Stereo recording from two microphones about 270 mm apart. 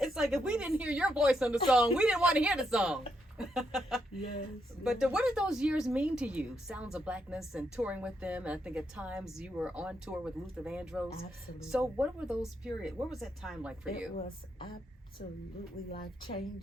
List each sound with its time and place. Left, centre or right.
0.0 s speech: centre
16.0 s a woman's voice: centre